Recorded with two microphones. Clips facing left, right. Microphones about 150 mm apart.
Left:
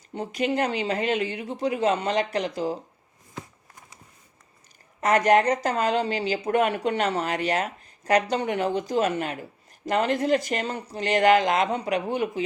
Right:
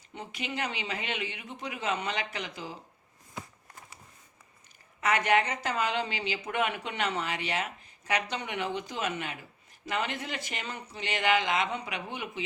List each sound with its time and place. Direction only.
0.1 s speech: 40° left (ahead or behind)
4.9 s speech: 40° left (ahead or behind)